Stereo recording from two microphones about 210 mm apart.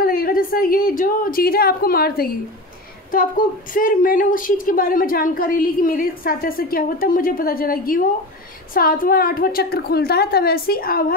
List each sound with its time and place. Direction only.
0.0 s a woman's voice: 45° left (ahead or behind)